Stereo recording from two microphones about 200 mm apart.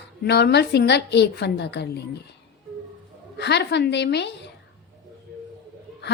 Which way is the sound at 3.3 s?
60° left (ahead or behind).